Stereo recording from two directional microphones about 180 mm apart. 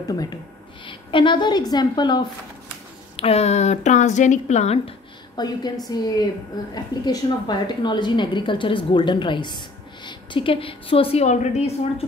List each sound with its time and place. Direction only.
0.1 s a woman's voice: 20° left (ahead or behind)
3.2 s a woman's voice: 35° left (ahead or behind)